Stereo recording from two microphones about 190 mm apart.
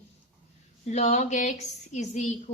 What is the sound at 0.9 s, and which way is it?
A woman's voice, 35° left (ahead or behind).